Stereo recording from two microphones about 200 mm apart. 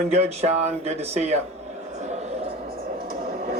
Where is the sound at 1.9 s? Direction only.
35° right (ahead or behind).